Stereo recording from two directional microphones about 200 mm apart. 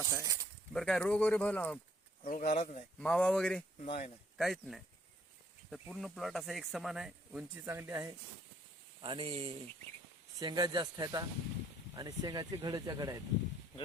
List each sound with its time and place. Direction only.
0.0 s speech: 15° right (ahead or behind)
0.7 s speech: 5° left (ahead or behind)
2.2 s speech: 45° left (ahead or behind)
2.6 s speech: 35° left (ahead or behind)
3.0 s speech: 5° left (ahead or behind)
3.8 s speech: 35° left (ahead or behind)
4.4 s speech: centre (ahead or behind)
9.0 s speech: 25° right (ahead or behind)